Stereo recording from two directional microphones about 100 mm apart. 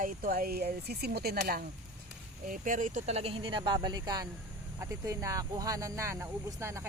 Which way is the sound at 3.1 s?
85° right.